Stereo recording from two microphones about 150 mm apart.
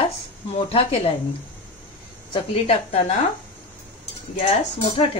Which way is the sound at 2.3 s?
40° left (ahead or behind).